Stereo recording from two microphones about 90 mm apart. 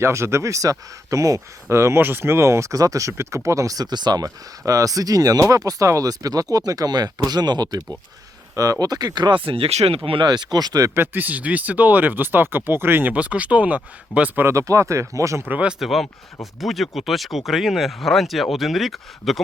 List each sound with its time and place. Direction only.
0.0 s speech: 30° right (ahead or behind); by 9.4 s 55° right (ahead or behind)
9.4 s speech: 90° right; by 10.9 s 45° right (ahead or behind)
10.9 s speech: 25° right (ahead or behind)
14.4 s speech: 35° right (ahead or behind)
15.4 s speech: 15° right (ahead or behind)
15.8 s speech: centre (ahead or behind)